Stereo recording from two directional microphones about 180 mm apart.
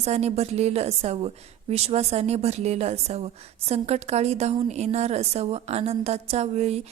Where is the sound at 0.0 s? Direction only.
35° right (ahead or behind).